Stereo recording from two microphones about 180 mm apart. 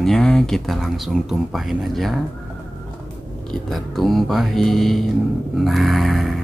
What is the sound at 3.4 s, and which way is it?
Speech, centre (ahead or behind).